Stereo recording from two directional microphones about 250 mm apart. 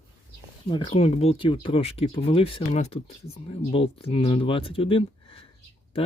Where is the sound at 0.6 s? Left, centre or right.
Centre.